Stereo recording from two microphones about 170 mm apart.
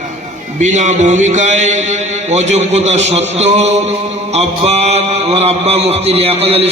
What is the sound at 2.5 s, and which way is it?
Mantra, 40° right (ahead or behind).